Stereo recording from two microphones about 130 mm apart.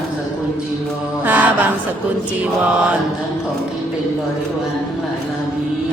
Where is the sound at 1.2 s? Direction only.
15° right (ahead or behind).